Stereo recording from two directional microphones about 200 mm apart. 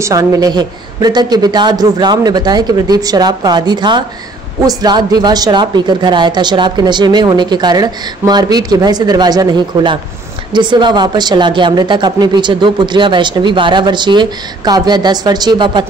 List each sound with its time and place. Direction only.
0.0 s speech: 15° right (ahead or behind)